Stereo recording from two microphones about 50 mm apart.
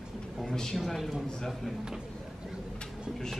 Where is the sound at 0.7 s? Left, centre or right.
Centre.